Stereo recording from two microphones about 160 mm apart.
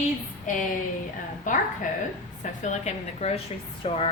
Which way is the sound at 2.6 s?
45° left (ahead or behind).